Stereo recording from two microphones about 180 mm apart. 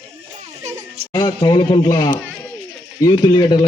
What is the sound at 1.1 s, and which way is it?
A man's voice, 25° left (ahead or behind).